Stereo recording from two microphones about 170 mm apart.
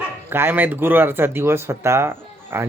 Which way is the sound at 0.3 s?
15° right (ahead or behind).